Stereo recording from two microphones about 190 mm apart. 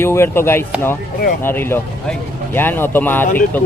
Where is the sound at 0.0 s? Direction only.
15° left (ahead or behind).